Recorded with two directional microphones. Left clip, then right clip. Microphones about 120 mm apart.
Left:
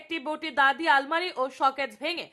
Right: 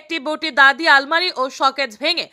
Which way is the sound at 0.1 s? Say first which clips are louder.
Right 9 dB; 35° right (ahead or behind).